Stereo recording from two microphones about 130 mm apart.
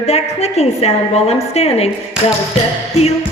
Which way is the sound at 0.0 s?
55° left (ahead or behind).